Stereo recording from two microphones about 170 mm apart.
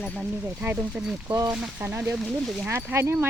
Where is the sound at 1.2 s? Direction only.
20° right (ahead or behind).